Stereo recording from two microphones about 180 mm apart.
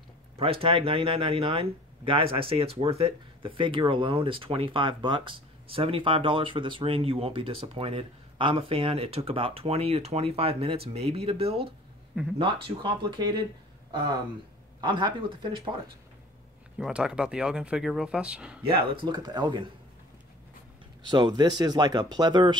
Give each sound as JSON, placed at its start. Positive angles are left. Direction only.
{"t": 0.4, "sound": "speech", "side_deg": -30}
{"t": 14.8, "sound": "speech", "side_deg": -25}
{"t": 16.7, "sound": "speech", "side_deg": -5}
{"t": 18.6, "sound": "speech", "side_deg": -30}
{"t": 21.1, "sound": "speech", "side_deg": -25}